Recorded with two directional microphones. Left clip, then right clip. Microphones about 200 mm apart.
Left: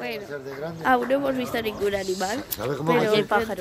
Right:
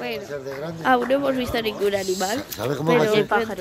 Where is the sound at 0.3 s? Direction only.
40° right (ahead or behind).